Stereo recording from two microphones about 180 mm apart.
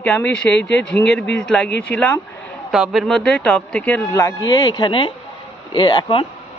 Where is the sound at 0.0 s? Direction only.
5° left (ahead or behind).